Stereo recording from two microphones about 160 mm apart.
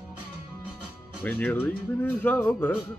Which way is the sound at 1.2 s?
10° left (ahead or behind).